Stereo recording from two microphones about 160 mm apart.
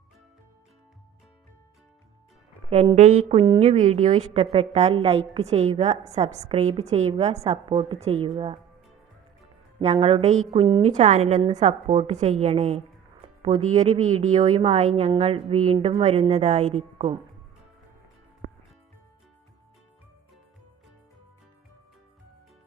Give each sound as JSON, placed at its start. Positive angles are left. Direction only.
{"t": 2.9, "sound": "a woman's voice", "side_deg": -50}
{"t": 9.8, "sound": "a woman's voice", "side_deg": -40}
{"t": 18.4, "sound": "music", "side_deg": -90}